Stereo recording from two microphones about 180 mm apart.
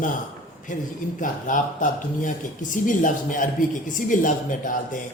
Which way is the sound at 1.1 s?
45° left (ahead or behind).